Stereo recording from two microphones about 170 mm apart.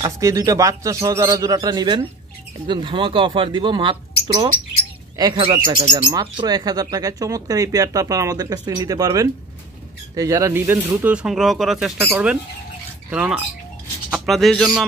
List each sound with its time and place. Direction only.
0.0 s speech: 20° right (ahead or behind)
5.1 s speech: 25° right (ahead or behind); by 11.9 s centre (ahead or behind)
12.1 s a sound: 5° right (ahead or behind)